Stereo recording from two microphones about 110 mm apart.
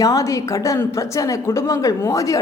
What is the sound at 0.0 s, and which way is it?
A woman's voice, 30° left (ahead or behind).